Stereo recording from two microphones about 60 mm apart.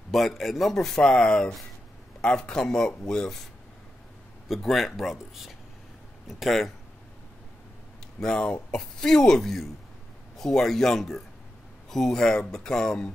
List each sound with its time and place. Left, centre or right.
0.1 s speech: centre
4.5 s speech: centre
8.2 s speech: centre